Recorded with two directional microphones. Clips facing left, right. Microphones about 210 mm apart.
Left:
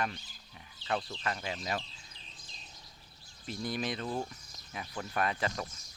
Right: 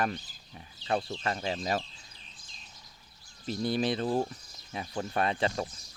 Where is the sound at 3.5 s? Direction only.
35° right (ahead or behind).